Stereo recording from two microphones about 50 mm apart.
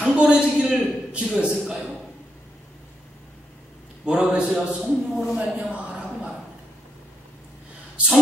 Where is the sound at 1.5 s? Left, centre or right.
Centre.